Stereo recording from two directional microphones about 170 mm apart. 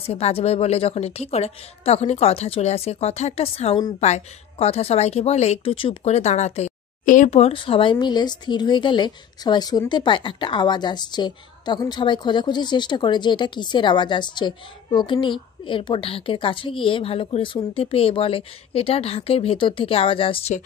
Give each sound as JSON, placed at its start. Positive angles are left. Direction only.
{"t": 0.0, "sound": "a woman's voice", "side_deg": 35}